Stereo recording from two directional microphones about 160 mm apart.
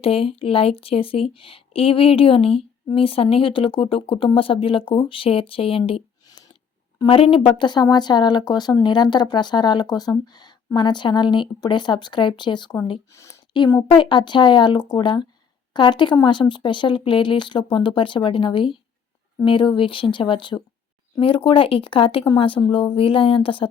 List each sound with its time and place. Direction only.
0.0 s speech: 35° left (ahead or behind)